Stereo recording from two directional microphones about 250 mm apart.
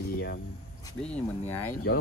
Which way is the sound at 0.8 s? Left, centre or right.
Centre.